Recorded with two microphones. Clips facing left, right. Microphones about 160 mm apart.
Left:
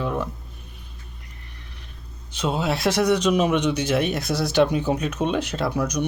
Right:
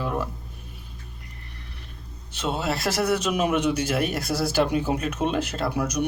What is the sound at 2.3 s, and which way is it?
A man's voice, centre (ahead or behind).